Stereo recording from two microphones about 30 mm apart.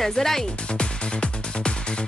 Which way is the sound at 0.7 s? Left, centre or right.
Left.